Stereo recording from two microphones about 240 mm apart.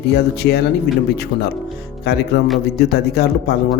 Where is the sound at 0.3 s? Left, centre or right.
Left.